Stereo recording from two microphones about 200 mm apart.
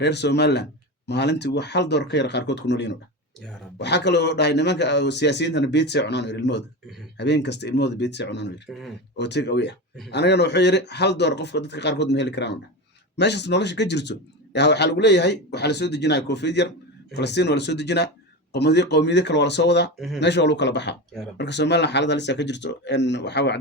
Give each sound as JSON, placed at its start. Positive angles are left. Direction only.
{"t": 0.0, "sound": "a man's voice", "side_deg": 60}